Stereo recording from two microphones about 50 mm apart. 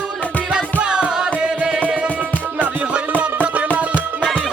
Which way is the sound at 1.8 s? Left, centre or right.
Right.